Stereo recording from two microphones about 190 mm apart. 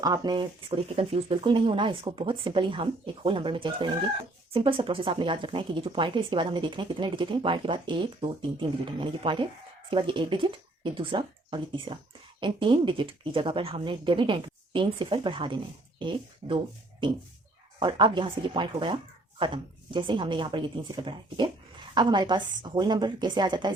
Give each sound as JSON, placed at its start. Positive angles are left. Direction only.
{"t": 0.0, "sound": "speech", "side_deg": -20}